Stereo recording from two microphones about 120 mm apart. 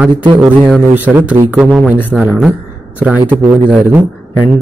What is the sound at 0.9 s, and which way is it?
Speech, 15° right (ahead or behind).